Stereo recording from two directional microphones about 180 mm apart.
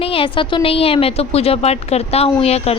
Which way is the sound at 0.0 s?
30° left (ahead or behind).